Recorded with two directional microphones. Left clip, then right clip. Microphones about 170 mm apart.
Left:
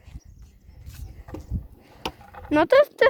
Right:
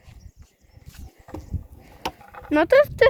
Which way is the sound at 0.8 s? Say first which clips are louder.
Right 1 dB; 70° left (ahead or behind).